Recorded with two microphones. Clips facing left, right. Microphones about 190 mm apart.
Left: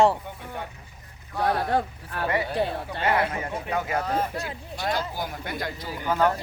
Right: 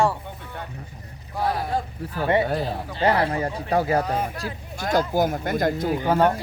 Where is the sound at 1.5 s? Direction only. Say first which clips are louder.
Left 2 dB; 65° left (ahead or behind).